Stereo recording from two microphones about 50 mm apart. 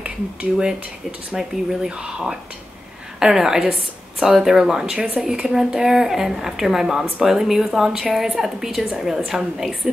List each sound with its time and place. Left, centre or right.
0.0 s speech: centre
1.3 s speech: centre